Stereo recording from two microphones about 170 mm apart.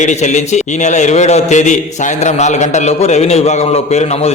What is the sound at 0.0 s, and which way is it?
A man's voice, 45° left (ahead or behind).